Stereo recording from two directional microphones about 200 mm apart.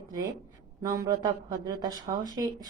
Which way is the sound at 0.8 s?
20° right (ahead or behind).